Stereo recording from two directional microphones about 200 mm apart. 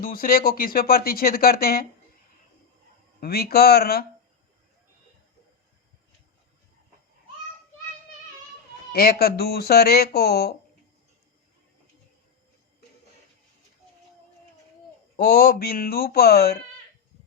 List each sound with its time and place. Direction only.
0.0 s speech: 45° left (ahead or behind)
3.2 s speech: 50° left (ahead or behind)
8.9 s speech: 50° left (ahead or behind)
15.1 s speech: 45° left (ahead or behind)